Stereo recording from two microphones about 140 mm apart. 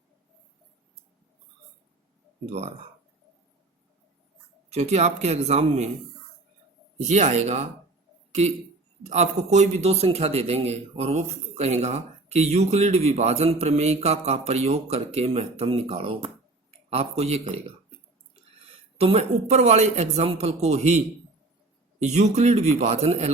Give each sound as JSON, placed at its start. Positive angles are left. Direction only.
{"t": 2.5, "sound": "a man's voice", "side_deg": -50}
{"t": 4.7, "sound": "a man's voice", "side_deg": -50}
{"t": 7.1, "sound": "a man's voice", "side_deg": -55}
{"t": 18.9, "sound": "a man's voice", "side_deg": -45}
{"t": 22.1, "sound": "a man's voice", "side_deg": -55}